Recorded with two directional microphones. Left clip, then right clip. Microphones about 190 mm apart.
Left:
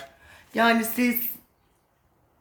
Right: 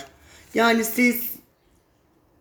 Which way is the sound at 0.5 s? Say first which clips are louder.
Right 2 dB; 25° left (ahead or behind).